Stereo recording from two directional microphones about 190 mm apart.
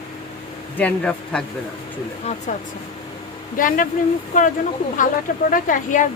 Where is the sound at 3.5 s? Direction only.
45° left (ahead or behind).